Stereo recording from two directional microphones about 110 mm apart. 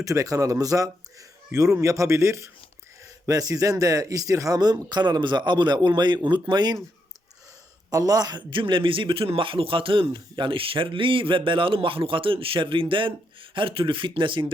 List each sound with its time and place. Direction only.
0.0 s a man's voice: 30° right (ahead or behind)
7.9 s a man's voice: 35° right (ahead or behind)